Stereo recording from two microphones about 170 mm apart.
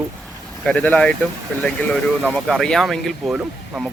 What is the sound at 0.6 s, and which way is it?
Speech, 10° left (ahead or behind).